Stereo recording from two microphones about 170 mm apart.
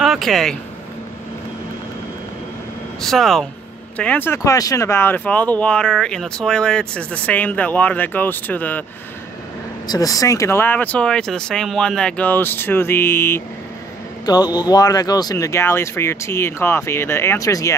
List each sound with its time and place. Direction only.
0.0 s speech: centre (ahead or behind)
3.0 s speech: centre (ahead or behind)
9.8 s speech: 20° left (ahead or behind)
14.2 s speech: 25° left (ahead or behind)